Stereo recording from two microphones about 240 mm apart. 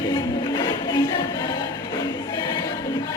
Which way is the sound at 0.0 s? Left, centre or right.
Centre.